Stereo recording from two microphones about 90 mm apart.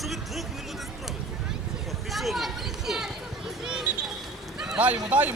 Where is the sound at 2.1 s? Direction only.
Centre (ahead or behind).